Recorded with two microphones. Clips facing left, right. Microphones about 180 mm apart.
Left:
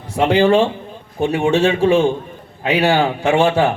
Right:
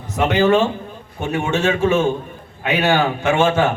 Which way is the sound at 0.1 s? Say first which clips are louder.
Left 2 dB; 30° left (ahead or behind).